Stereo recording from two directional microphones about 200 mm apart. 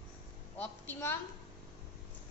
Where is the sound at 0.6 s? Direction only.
10° left (ahead or behind).